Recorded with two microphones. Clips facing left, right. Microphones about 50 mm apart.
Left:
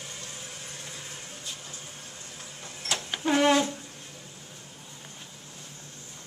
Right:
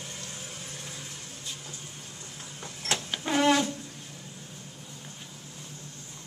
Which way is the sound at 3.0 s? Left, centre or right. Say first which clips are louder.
Left 3 dB; centre.